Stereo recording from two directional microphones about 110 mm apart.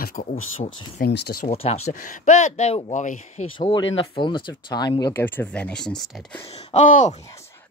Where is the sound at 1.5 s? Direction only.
75° left (ahead or behind).